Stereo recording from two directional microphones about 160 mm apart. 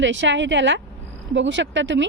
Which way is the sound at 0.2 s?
90° right.